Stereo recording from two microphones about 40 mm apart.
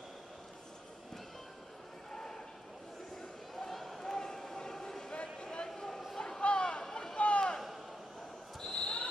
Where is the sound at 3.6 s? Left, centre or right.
Centre.